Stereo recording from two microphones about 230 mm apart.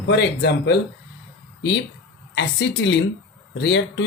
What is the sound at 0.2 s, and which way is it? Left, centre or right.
Speech, left.